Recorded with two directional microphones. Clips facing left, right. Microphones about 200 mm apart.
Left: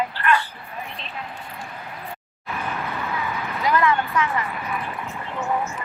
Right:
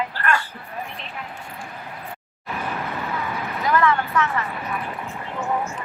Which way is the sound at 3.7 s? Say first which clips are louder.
Even; 15° left (ahead or behind).